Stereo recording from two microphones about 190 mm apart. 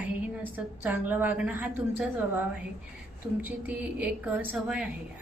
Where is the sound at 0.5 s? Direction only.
10° right (ahead or behind).